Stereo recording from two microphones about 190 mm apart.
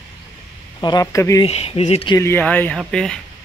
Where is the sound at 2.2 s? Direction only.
10° left (ahead or behind).